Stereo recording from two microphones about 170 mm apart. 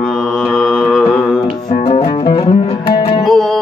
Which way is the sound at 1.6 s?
40° left (ahead or behind).